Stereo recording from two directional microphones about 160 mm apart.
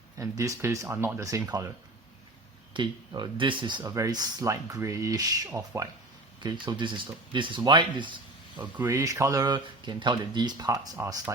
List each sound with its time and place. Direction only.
0.2 s speech: 20° right (ahead or behind)
2.7 s speech: 30° right (ahead or behind)
6.4 s speech: 30° right (ahead or behind)
8.5 s speech: 10° right (ahead or behind)